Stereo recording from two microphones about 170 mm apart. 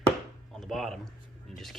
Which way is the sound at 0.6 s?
Centre (ahead or behind).